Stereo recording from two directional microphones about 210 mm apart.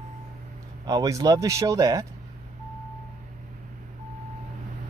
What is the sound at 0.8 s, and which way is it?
Speech, 15° right (ahead or behind).